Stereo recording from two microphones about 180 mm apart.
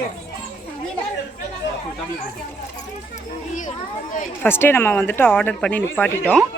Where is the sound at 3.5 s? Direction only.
45° left (ahead or behind).